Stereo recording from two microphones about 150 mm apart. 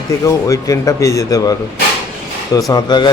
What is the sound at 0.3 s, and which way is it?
A man's voice, 20° left (ahead or behind).